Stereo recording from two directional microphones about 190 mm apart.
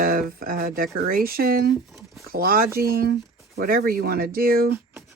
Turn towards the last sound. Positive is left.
turn(degrees=-50)  # may be behind; listen again after turning